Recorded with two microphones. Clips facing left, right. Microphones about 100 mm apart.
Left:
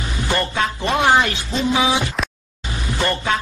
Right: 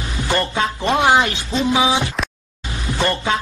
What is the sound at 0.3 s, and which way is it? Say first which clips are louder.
Speech: right 1 dB; 25° right (ahead or behind).